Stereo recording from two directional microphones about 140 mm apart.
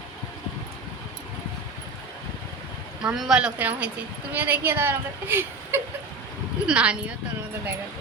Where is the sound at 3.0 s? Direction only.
5° right (ahead or behind).